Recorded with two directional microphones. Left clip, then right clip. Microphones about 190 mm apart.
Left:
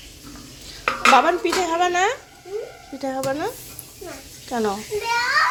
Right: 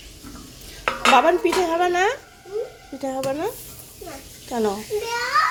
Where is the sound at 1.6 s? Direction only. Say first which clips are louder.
Even; 15° right (ahead or behind).